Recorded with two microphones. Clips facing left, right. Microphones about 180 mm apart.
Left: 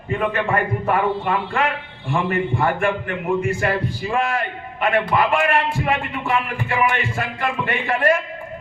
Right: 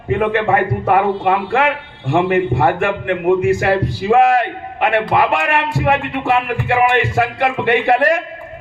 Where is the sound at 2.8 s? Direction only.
75° right (ahead or behind).